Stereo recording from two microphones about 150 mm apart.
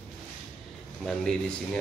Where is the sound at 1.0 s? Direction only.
5° left (ahead or behind).